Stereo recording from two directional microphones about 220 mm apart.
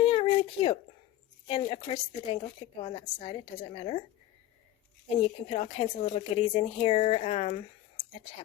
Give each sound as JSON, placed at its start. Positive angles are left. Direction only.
{"t": 0.0, "sound": "a sound", "side_deg": 25}
{"t": 1.5, "sound": "a woman's voice", "side_deg": 25}
{"t": 5.1, "sound": "a woman's voice", "side_deg": 25}